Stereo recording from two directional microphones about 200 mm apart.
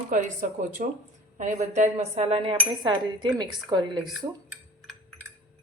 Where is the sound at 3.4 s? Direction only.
20° right (ahead or behind).